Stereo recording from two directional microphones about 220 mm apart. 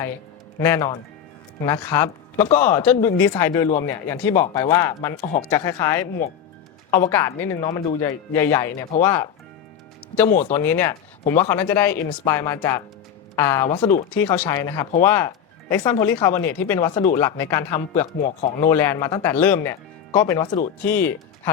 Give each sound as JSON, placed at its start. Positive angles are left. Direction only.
{"t": 0.6, "sound": "speech", "side_deg": 10}
{"t": 18.0, "sound": "a man's voice", "side_deg": 30}
{"t": 18.6, "sound": "speech", "side_deg": 10}